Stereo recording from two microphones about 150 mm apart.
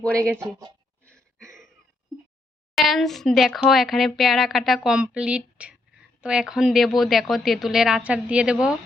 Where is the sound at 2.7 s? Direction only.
Centre (ahead or behind).